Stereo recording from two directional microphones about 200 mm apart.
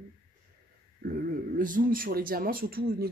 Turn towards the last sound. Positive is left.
turn(degrees=-50)  # may be behind; listen again after turning